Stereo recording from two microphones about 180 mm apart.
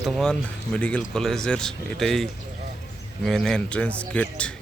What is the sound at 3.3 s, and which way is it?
Speech, centre (ahead or behind).